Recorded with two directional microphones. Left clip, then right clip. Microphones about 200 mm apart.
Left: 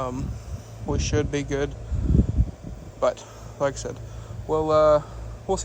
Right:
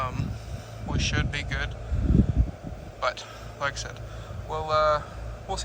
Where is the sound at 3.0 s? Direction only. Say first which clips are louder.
Left 5 dB; 40° left (ahead or behind).